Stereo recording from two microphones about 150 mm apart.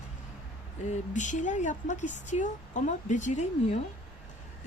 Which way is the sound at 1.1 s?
55° left (ahead or behind).